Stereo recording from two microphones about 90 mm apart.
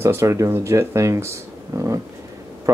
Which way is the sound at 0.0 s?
30° right (ahead or behind).